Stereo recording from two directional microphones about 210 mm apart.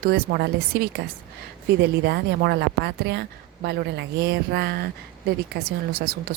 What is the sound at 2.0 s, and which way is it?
A woman's voice, 50° right (ahead or behind).